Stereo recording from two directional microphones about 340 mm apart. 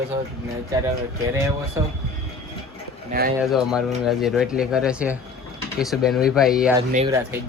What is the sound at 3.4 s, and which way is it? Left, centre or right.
Speech, centre.